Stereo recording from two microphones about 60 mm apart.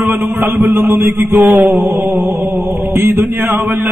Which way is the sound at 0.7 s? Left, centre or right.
Right.